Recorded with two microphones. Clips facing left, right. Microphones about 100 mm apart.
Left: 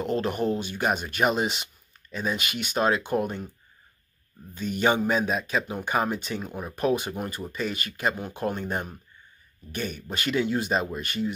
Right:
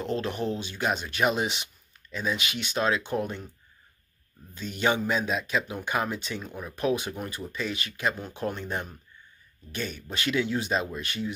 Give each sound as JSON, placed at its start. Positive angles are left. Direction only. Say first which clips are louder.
{"t": 0.0, "sound": "speech", "louder": "left 3 dB", "side_deg": 5}
{"t": 4.6, "sound": "speech", "louder": "left 3 dB", "side_deg": 5}
{"t": 5.3, "sound": "speech", "louder": "left 1 dB", "side_deg": 45}
{"t": 5.6, "sound": "speech", "louder": "left 3 dB", "side_deg": 0}